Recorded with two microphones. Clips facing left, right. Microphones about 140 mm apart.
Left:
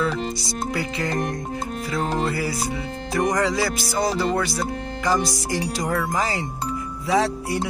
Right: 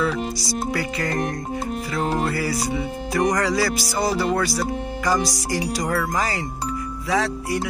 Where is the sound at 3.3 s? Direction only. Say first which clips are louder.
Right 1 dB; 15° left (ahead or behind).